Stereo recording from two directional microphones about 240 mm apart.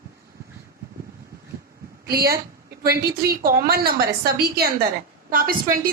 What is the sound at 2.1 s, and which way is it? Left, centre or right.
A woman's voice, right.